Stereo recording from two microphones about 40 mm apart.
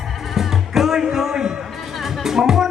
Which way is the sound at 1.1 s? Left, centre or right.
Centre.